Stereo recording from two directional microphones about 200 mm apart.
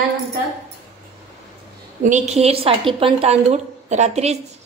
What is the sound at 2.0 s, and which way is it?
A woman's voice, 35° right (ahead or behind).